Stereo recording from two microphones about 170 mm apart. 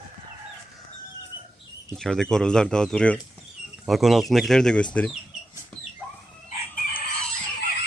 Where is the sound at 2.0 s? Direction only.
5° left (ahead or behind).